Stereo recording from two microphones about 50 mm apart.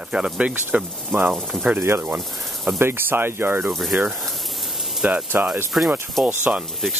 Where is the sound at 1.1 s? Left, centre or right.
Right.